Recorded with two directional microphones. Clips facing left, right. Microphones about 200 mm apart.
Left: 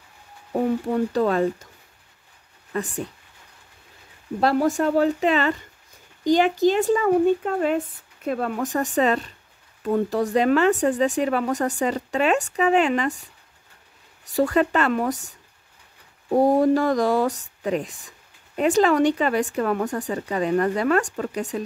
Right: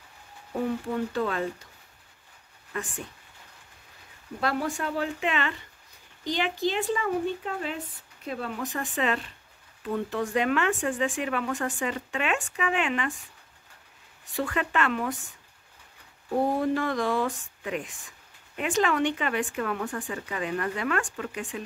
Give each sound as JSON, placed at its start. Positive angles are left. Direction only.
{"t": 0.8, "sound": "speech", "side_deg": 40}
{"t": 2.7, "sound": "speech", "side_deg": 40}
{"t": 4.4, "sound": "speech", "side_deg": 40}
{"t": 14.3, "sound": "speech", "side_deg": 40}
{"t": 16.3, "sound": "speech", "side_deg": 40}